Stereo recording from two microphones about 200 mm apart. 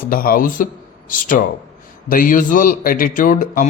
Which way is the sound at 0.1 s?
45° left (ahead or behind).